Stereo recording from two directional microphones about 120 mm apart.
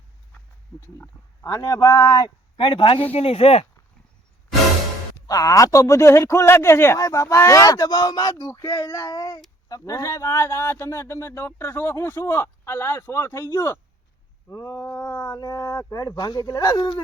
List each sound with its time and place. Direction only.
0.3 s speech: 20° left (ahead or behind); by 3.7 s 55° left (ahead or behind)
5.3 s a man's voice: 30° left (ahead or behind)